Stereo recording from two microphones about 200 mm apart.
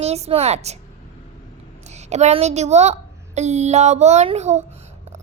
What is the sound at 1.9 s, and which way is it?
A woman's voice, 35° right (ahead or behind).